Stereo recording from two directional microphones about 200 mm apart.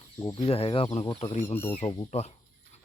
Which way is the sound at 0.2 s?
15° left (ahead or behind).